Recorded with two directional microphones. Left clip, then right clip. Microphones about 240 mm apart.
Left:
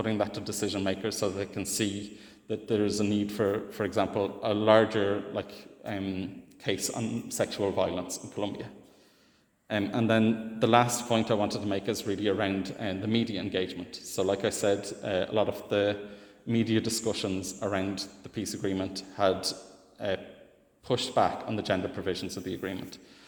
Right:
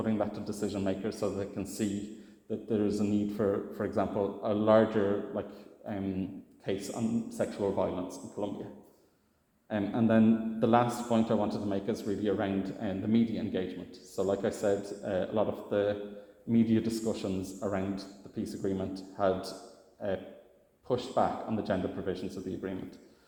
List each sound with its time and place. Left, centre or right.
0.0 s a man's voice: left
9.6 s a man's voice: left